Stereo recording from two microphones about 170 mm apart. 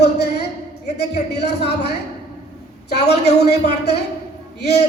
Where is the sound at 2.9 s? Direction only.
80° left.